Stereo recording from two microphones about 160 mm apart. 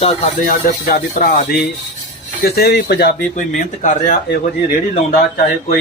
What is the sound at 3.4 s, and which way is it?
Speech, 50° left (ahead or behind).